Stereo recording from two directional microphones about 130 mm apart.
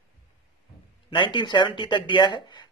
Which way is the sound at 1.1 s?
40° left (ahead or behind).